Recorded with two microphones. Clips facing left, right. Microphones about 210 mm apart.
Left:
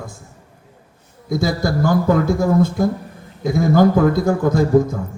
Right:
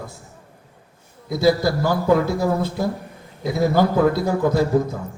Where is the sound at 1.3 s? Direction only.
50° left (ahead or behind).